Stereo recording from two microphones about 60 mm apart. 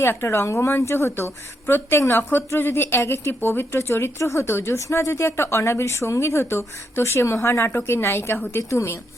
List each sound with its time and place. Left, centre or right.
0.0 s speech: left